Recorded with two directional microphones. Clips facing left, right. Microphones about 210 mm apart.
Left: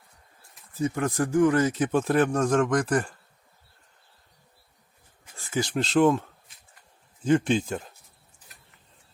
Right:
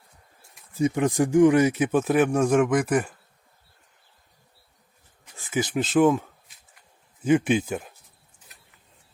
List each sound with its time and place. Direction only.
0.8 s speech: 15° right (ahead or behind)
5.4 s a sound: 15° right (ahead or behind)
5.8 s a man's voice: 5° right (ahead or behind)